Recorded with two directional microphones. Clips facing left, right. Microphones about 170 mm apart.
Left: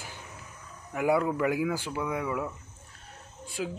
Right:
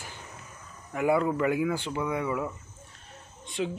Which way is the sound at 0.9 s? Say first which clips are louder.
Right 1 dB; 10° left (ahead or behind).